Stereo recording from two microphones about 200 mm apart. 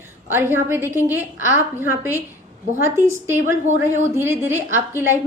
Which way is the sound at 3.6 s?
35° right (ahead or behind).